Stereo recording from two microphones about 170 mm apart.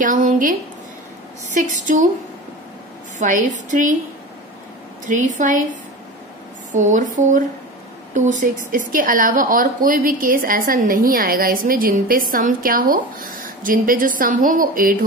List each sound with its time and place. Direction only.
0.0 s speech: 50° right (ahead or behind)
3.2 s speech: 50° right (ahead or behind)
5.0 s a woman's voice: 50° right (ahead or behind)
6.7 s a woman's voice: 50° right (ahead or behind)